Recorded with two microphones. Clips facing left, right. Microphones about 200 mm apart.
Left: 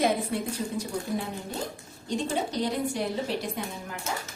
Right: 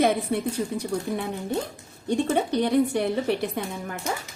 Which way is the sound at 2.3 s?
60° right (ahead or behind).